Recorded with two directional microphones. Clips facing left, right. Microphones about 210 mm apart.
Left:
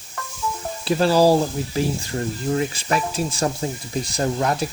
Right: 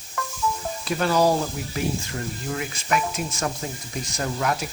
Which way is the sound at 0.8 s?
30° left (ahead or behind).